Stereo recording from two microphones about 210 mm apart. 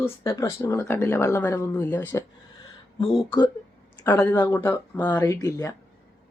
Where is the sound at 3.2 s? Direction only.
20° left (ahead or behind).